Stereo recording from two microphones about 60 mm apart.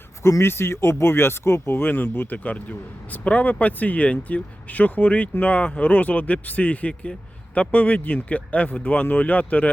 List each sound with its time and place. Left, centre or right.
0.2 s speech: left